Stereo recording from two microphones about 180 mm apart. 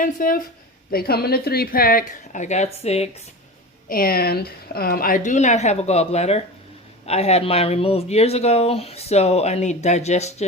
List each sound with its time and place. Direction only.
0.0 s a woman's voice: 50° left (ahead or behind)
3.8 s a woman's voice: 55° left (ahead or behind); by 10.4 s 40° left (ahead or behind)